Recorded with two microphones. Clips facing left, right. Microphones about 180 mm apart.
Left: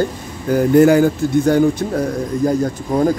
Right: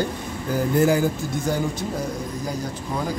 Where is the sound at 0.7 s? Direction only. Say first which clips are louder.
Left 9 dB; 70° left (ahead or behind).